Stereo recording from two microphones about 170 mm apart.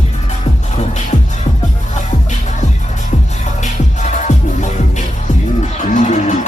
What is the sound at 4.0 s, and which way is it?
Music, 45° left (ahead or behind).